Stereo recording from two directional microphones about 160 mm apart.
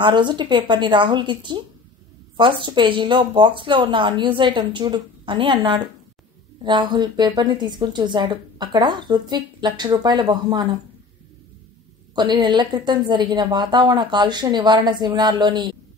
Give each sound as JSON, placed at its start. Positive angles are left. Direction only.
{"t": 0.0, "sound": "a woman's voice", "side_deg": -30}
{"t": 12.2, "sound": "a woman's voice", "side_deg": -30}